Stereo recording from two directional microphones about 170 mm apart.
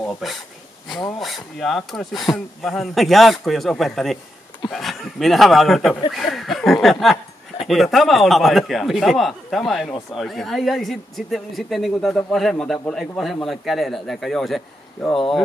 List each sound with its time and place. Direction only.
0.0 s speech: centre (ahead or behind)